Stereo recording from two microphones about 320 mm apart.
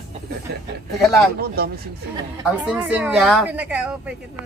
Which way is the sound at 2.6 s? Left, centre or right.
Centre.